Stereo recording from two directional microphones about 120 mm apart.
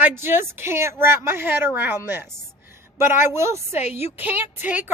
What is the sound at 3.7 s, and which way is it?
Speech, 65° left (ahead or behind).